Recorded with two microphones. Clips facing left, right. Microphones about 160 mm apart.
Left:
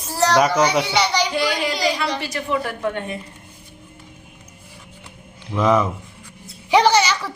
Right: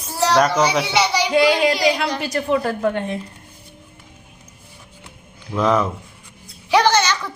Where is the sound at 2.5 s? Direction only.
40° right (ahead or behind).